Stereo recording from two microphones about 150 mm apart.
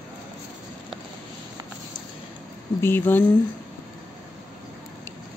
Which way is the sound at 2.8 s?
15° left (ahead or behind).